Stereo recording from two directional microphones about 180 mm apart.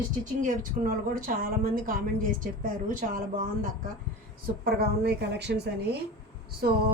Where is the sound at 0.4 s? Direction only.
50° right (ahead or behind).